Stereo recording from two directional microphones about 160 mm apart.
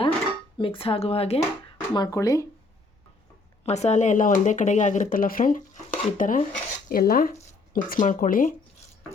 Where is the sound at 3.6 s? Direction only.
45° left (ahead or behind).